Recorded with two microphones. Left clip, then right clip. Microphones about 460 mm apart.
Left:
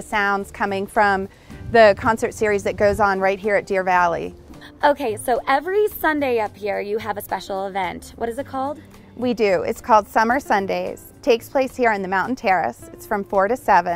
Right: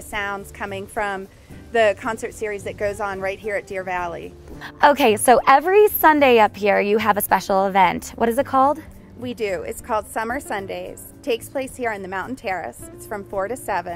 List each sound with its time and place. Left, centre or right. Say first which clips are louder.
0.1 s a woman's voice: left 6 dB; left
4.7 s a woman's voice: right 4 dB; right
9.2 s a woman's voice: left 7 dB; left